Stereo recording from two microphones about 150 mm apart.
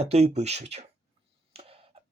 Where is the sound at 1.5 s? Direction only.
40° right (ahead or behind).